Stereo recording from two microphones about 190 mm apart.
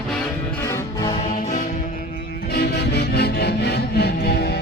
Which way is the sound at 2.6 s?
60° left (ahead or behind).